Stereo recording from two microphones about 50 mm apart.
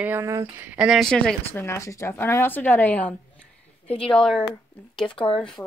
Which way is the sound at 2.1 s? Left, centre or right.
Left.